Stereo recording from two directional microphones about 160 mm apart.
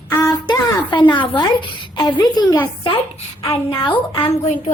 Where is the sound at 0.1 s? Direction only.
15° left (ahead or behind).